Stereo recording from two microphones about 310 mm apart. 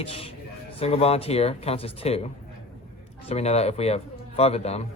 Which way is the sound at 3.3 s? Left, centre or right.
Centre.